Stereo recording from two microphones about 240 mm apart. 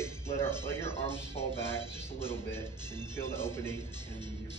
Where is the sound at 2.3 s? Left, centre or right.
Centre.